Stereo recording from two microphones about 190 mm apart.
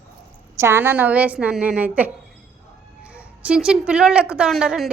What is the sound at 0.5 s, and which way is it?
A woman's voice, 15° right (ahead or behind).